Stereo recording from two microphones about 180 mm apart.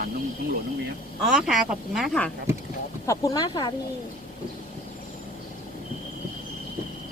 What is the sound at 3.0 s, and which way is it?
Speech, 20° left (ahead or behind).